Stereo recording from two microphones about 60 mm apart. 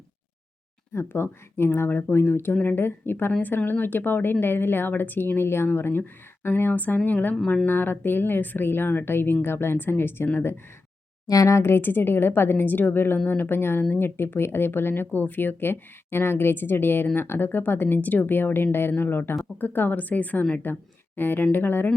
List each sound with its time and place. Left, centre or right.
0.9 s a woman's voice: left
11.3 s speech: left
11.5 s a woman's voice: left